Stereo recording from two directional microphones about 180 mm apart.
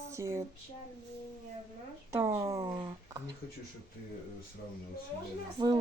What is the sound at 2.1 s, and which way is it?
Speech, 15° right (ahead or behind).